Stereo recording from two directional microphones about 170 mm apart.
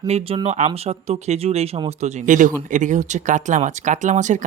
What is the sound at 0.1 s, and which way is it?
Speech, 35° right (ahead or behind).